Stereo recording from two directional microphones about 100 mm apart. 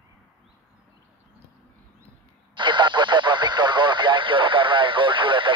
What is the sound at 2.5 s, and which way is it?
Radio, 50° right (ahead or behind).